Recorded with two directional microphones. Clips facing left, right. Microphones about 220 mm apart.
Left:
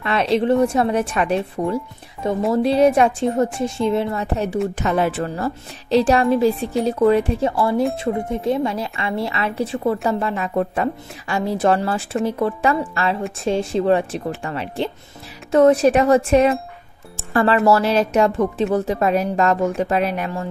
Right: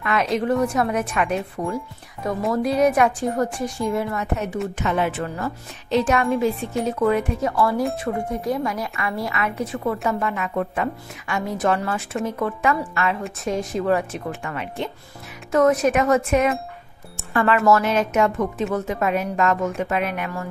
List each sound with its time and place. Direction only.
0.0 s a woman's voice: 30° left (ahead or behind)